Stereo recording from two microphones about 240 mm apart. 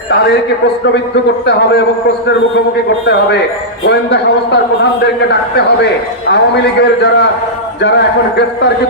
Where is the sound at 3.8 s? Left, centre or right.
Left.